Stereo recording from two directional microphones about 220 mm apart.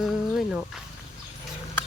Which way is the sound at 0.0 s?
Centre (ahead or behind).